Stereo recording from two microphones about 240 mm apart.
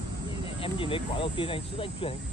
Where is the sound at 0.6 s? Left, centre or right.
Left.